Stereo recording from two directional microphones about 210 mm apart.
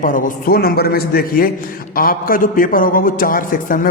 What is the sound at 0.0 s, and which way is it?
A man's voice, 40° left (ahead or behind).